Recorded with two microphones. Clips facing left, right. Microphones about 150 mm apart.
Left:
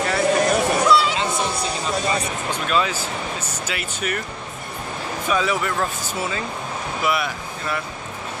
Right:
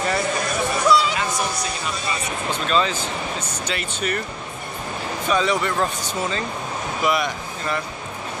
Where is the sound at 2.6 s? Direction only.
10° left (ahead or behind).